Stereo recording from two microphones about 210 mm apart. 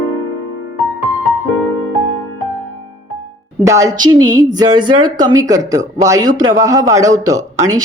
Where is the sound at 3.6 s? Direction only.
15° right (ahead or behind).